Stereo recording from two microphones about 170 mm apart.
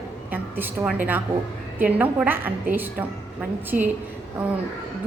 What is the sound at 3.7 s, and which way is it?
Speech, 55° right (ahead or behind).